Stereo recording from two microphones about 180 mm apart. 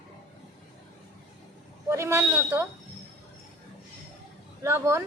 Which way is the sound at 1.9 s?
15° right (ahead or behind).